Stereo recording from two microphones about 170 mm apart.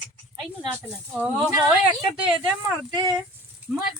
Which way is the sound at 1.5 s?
15° right (ahead or behind).